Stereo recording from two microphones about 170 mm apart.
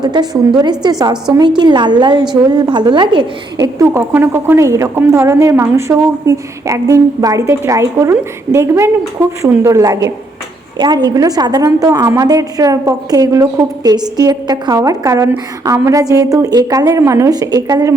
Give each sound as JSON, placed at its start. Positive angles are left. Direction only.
{"t": 0.0, "sound": "a woman's voice", "side_deg": -25}